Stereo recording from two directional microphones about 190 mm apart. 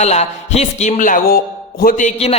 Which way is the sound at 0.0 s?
35° left (ahead or behind).